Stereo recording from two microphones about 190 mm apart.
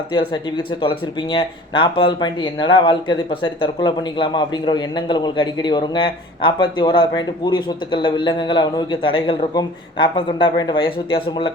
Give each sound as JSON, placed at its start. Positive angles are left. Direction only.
{"t": 0.1, "sound": "speech", "side_deg": 25}